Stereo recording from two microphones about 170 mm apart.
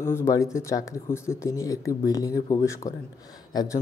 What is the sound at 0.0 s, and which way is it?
Speech, 15° left (ahead or behind).